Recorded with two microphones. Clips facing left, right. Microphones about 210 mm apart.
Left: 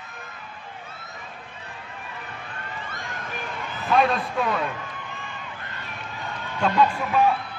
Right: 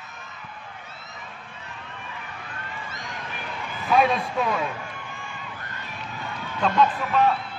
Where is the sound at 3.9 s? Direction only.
Centre (ahead or behind).